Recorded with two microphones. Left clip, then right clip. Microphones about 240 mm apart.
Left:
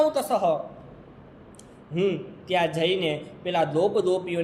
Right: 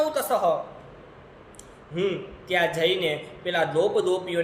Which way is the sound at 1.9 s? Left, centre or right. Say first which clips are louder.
Left 1 dB; centre.